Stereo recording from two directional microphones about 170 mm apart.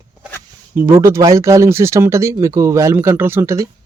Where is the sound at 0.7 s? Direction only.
15° right (ahead or behind).